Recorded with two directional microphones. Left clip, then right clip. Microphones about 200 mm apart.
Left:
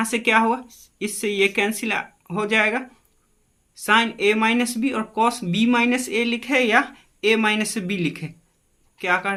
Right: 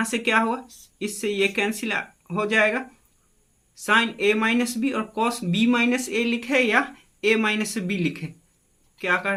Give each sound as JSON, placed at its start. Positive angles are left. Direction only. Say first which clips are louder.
{"t": 0.0, "sound": "speech", "louder": "left 3 dB", "side_deg": 20}